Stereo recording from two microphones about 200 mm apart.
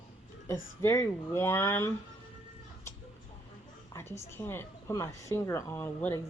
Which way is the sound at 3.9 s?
15° left (ahead or behind).